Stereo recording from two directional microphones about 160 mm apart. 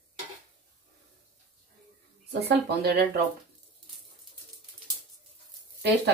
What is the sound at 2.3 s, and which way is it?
Speech, 90° right.